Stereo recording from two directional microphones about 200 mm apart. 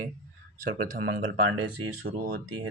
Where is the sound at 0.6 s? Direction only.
45° right (ahead or behind).